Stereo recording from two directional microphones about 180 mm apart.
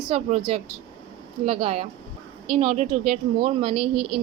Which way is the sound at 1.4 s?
35° right (ahead or behind).